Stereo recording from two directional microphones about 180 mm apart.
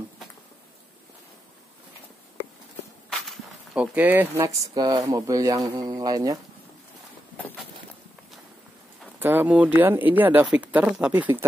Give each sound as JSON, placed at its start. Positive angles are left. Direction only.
{"t": 3.1, "sound": "speech", "side_deg": 0}
{"t": 9.2, "sound": "speech", "side_deg": -10}